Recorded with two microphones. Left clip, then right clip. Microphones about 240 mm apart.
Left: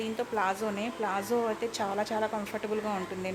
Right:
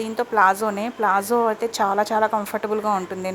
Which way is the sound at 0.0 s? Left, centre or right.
Centre.